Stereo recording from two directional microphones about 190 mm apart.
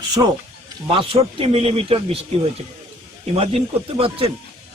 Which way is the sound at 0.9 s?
30° right (ahead or behind).